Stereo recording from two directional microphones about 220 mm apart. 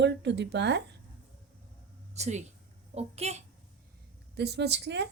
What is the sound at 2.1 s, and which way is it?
A child's voice, 30° right (ahead or behind).